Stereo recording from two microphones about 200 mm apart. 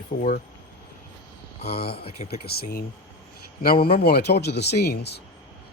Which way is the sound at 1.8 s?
50° left (ahead or behind).